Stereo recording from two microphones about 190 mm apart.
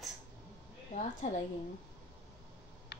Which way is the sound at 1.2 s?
35° left (ahead or behind).